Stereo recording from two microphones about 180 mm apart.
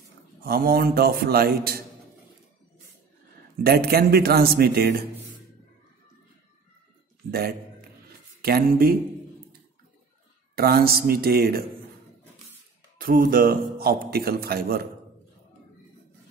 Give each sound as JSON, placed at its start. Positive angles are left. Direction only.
{"t": 0.4, "sound": "a man's voice", "side_deg": -55}
{"t": 3.6, "sound": "a man's voice", "side_deg": -60}
{"t": 7.2, "sound": "a man's voice", "side_deg": -60}
{"t": 10.5, "sound": "a man's voice", "side_deg": -60}
{"t": 12.9, "sound": "a man's voice", "side_deg": -50}